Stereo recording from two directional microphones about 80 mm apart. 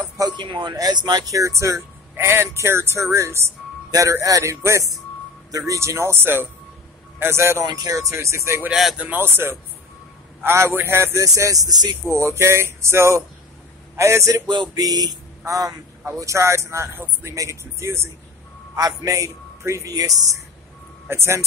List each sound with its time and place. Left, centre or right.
0.4 s a man's voice: right
0.7 s speech: right
1.3 s speech: right
7.6 s speech: right
8.9 s speech: right
11.2 s a man's voice: right
12.1 s speech: right
14.7 s speech: right
15.4 s a man's voice: right
18.8 s a man's voice: right
21.1 s speech: right